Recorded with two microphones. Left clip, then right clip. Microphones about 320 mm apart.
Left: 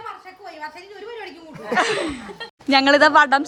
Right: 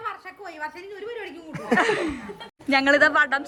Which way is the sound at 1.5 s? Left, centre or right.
Right.